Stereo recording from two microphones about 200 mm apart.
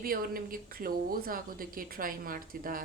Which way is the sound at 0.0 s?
45° right (ahead or behind).